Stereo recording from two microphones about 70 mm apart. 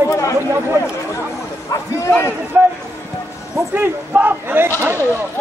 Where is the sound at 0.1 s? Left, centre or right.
Left.